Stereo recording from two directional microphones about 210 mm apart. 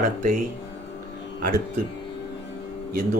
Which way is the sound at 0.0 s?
35° right (ahead or behind).